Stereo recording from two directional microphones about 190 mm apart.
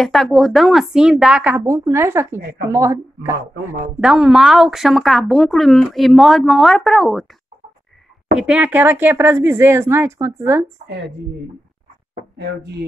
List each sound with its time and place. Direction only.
0.0 s speech: centre (ahead or behind); by 3.3 s 15° right (ahead or behind)
4.0 s speech: 5° right (ahead or behind)
8.4 s speech: 5° right (ahead or behind)
12.4 s speech: 60° right (ahead or behind)